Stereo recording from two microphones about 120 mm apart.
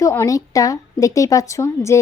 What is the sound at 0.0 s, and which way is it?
A woman's voice, 25° left (ahead or behind).